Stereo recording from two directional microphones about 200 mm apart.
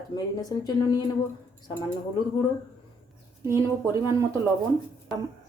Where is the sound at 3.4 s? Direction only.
15° right (ahead or behind).